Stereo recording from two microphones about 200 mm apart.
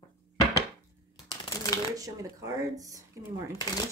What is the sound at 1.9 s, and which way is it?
Speech, 15° right (ahead or behind).